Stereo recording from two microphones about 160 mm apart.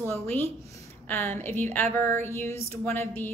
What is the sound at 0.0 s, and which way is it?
A woman's voice, 15° left (ahead or behind).